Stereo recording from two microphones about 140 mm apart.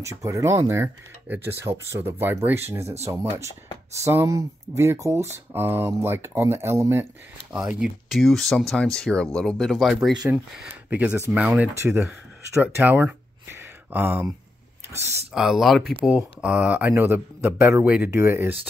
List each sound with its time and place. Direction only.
0.0 s speech: 20° right (ahead or behind)
7.5 s speech: 5° right (ahead or behind)
11.7 s speech: 20° right (ahead or behind)
12.7 s a sound: 15° right (ahead or behind)
15.3 s speech: centre (ahead or behind)